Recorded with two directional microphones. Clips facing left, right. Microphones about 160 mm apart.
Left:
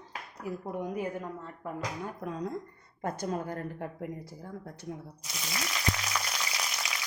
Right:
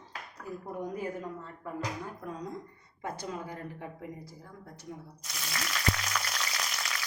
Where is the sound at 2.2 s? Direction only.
70° left (ahead or behind).